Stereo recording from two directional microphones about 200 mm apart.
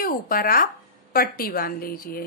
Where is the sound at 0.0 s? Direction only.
45° left (ahead or behind).